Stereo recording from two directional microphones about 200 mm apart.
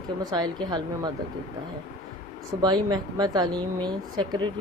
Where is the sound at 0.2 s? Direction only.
20° right (ahead or behind).